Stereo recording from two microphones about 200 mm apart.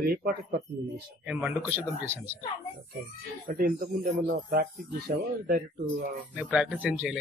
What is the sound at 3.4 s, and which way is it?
Speech, 50° right (ahead or behind).